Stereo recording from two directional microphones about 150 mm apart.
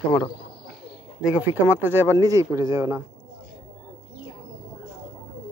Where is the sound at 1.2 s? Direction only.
10° right (ahead or behind).